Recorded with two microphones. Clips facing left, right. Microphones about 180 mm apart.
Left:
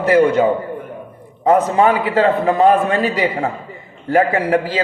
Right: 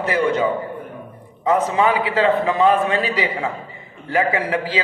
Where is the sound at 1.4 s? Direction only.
45° left (ahead or behind).